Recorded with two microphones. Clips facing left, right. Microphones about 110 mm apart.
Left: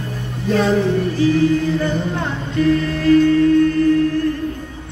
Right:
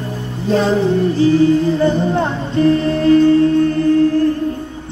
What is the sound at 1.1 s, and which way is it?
Music, 30° right (ahead or behind).